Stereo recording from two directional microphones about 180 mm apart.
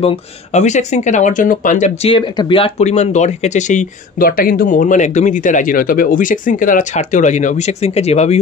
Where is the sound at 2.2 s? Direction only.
25° left (ahead or behind).